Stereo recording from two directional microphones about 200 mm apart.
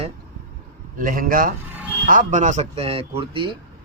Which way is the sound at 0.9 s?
45° right (ahead or behind).